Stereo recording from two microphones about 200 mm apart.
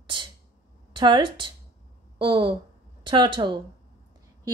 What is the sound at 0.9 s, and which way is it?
A woman's voice, 25° right (ahead or behind).